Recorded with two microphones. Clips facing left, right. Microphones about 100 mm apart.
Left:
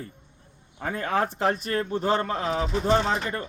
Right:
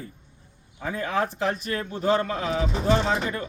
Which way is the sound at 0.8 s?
45° left (ahead or behind).